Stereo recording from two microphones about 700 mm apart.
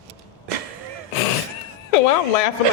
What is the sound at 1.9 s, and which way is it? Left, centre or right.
Speech, left.